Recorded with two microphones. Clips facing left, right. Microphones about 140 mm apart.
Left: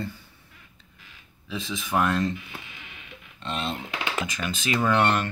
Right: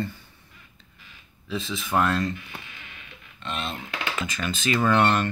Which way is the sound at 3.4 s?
35° left (ahead or behind).